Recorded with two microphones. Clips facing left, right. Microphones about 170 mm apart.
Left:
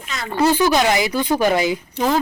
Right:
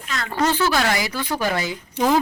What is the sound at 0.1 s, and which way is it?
Speech, 10° left (ahead or behind).